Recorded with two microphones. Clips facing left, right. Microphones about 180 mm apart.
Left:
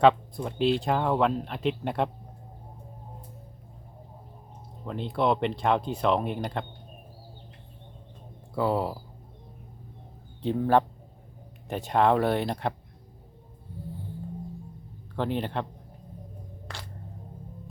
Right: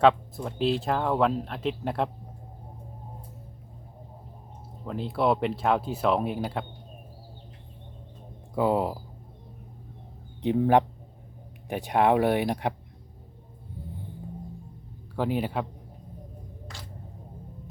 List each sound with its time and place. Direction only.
0.0 s speech: centre (ahead or behind)
4.9 s speech: 5° right (ahead or behind)
8.5 s speech: 15° right (ahead or behind)
10.4 s speech: 15° right (ahead or behind)
15.1 s speech: 10° right (ahead or behind)
16.7 s a sound: 65° left (ahead or behind)